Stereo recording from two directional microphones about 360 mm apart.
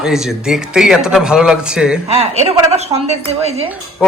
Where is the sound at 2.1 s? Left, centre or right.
Centre.